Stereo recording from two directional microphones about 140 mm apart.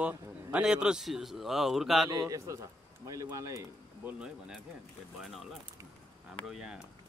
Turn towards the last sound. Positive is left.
turn(degrees=-5)  # may be behind; listen again after turning